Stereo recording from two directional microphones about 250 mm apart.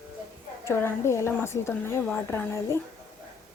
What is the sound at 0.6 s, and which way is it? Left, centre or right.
A woman's voice, centre.